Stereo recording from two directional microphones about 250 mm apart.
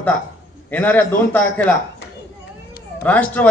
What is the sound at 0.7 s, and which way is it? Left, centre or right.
A man's voice, centre.